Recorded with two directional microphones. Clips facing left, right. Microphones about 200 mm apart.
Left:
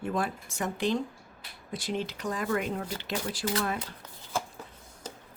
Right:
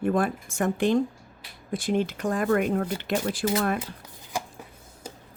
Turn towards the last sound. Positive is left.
turn(degrees=-15)  # may be behind; listen again after turning